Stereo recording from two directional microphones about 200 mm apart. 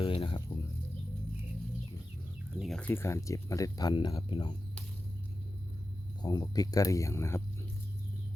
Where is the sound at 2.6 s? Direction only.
5° left (ahead or behind); by 4.5 s 20° left (ahead or behind).